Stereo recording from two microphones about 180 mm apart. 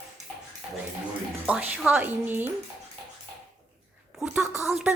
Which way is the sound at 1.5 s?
10° right (ahead or behind).